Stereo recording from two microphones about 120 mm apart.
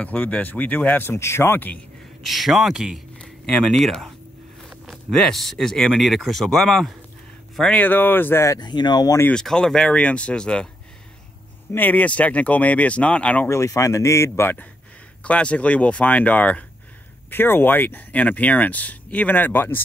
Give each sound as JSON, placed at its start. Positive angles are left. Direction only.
{"t": 0.0, "sound": "speech", "side_deg": 10}
{"t": 2.2, "sound": "speech", "side_deg": 0}
{"t": 8.5, "sound": "speech", "side_deg": 35}
{"t": 9.3, "sound": "speech", "side_deg": 5}
{"t": 11.7, "sound": "speech", "side_deg": 15}
{"t": 13.5, "sound": "speech", "side_deg": 25}